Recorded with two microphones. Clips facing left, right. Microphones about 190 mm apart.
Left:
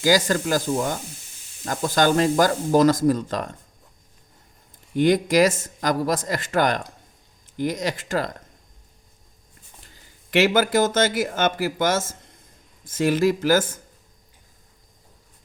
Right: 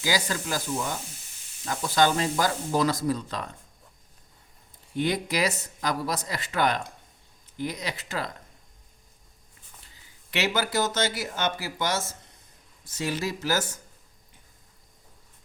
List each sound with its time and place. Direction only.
0.0 s speech: 45° left (ahead or behind)
5.0 s speech: 45° left (ahead or behind)
9.9 s speech: 45° left (ahead or behind)